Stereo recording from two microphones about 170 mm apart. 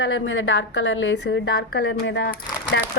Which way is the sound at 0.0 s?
90° left.